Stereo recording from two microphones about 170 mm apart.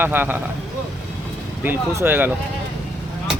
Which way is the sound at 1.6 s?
10° right (ahead or behind).